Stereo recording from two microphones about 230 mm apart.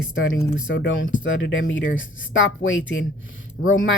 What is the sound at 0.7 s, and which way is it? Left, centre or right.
Speech, left.